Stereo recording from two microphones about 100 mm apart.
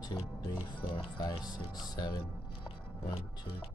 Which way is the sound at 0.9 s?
60° left (ahead or behind).